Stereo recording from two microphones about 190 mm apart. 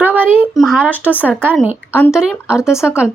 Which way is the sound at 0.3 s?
Centre (ahead or behind).